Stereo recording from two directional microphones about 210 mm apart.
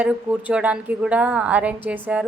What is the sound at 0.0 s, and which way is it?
Speech, 5° right (ahead or behind).